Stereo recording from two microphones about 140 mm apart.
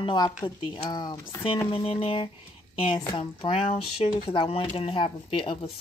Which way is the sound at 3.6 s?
45° left (ahead or behind).